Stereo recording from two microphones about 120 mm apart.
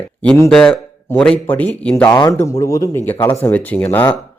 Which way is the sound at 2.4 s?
25° left (ahead or behind).